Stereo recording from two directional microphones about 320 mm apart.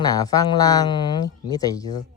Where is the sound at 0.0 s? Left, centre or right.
Centre.